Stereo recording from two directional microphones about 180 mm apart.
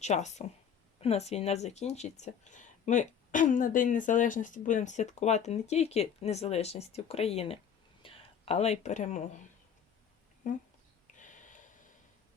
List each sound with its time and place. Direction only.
0.0 s speech: 40° left (ahead or behind)
10.4 s speech: 45° left (ahead or behind)
11.2 s a sound: 45° left (ahead or behind)